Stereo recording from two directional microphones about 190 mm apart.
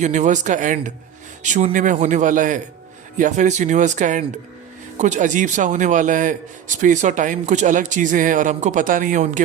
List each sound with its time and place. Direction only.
0.0 s a man's voice: 40° right (ahead or behind)